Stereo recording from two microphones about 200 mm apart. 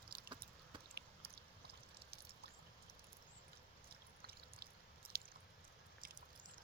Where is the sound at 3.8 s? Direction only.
50° right (ahead or behind).